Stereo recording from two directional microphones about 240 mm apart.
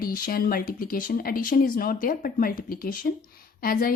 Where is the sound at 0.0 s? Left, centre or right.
Left.